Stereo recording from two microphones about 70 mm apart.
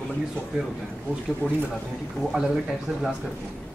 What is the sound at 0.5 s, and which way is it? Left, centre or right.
Speech, centre.